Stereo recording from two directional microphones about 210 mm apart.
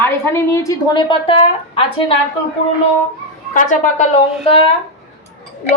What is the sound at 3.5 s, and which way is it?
A woman's voice, 30° left (ahead or behind).